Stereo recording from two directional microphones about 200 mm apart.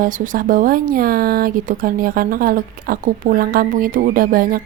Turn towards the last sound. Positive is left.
turn(degrees=-45)  # may be behind; listen again after turning